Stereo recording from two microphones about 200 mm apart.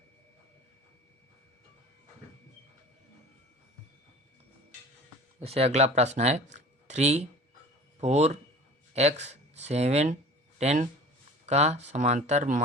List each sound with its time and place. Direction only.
5.4 s speech: 30° right (ahead or behind)